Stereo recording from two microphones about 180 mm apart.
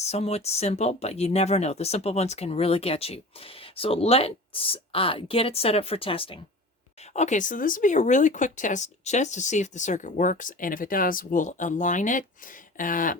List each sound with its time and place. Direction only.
0.0 s speech: 35° left (ahead or behind)
7.1 s speech: 40° left (ahead or behind)